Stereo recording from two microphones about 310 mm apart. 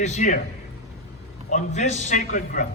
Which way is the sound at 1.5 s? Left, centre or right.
Left.